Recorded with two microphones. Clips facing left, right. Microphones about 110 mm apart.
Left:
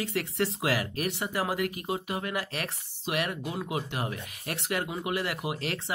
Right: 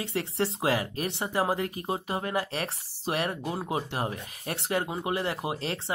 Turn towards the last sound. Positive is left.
turn(degrees=-30)  # may be behind; listen again after turning